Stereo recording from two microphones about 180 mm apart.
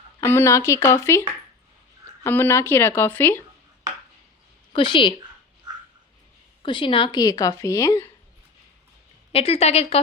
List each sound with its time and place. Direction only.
0.3 s speech: 15° left (ahead or behind)
2.2 s speech: 10° left (ahead or behind)
4.7 s a woman's voice: 25° left (ahead or behind)
6.6 s speech: 30° left (ahead or behind)
9.3 s a woman's voice: 35° left (ahead or behind)